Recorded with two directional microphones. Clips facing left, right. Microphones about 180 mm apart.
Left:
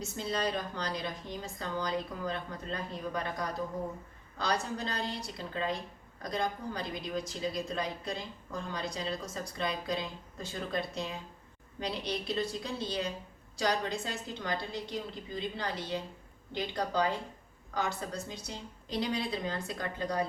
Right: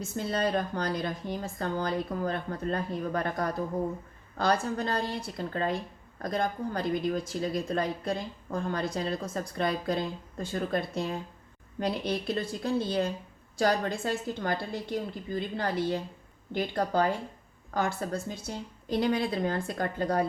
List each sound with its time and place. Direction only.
0.2 s speech: 55° right (ahead or behind)